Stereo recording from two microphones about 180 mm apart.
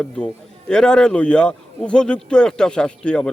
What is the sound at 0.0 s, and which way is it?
Speech, 5° left (ahead or behind).